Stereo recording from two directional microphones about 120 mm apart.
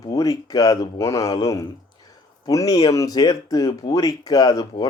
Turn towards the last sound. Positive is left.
turn(degrees=30)  # may be behind; listen again after turning